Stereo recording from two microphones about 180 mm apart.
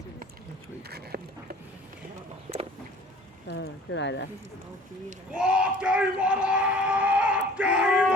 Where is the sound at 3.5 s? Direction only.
75° left (ahead or behind).